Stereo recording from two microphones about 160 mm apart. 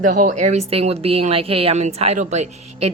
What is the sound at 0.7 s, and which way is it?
A woman's voice, 40° right (ahead or behind).